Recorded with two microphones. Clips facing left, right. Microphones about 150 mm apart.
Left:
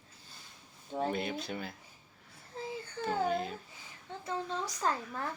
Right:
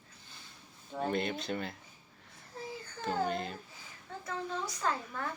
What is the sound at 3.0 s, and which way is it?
Speech, 5° left (ahead or behind).